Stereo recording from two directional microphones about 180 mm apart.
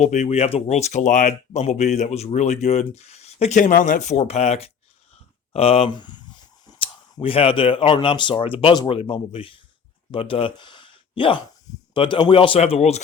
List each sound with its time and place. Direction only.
0.0 s a man's voice: 40° left (ahead or behind)